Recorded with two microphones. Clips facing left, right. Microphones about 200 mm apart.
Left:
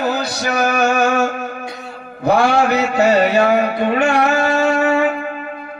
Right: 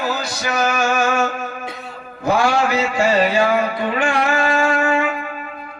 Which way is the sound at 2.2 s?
60° left (ahead or behind).